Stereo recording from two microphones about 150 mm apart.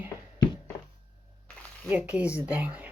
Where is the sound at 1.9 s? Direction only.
10° right (ahead or behind).